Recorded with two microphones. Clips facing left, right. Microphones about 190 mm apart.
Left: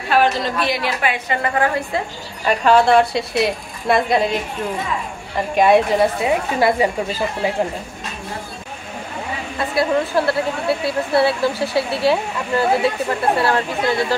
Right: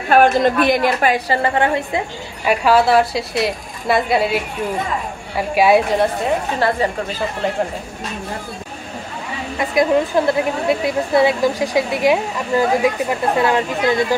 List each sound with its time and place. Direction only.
0.1 s a woman's voice: 50° right (ahead or behind); by 7.6 s 5° left (ahead or behind)
9.6 s a woman's voice: 15° right (ahead or behind)